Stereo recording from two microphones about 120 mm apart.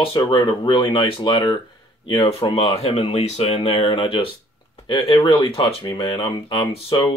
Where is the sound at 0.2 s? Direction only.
40° left (ahead or behind).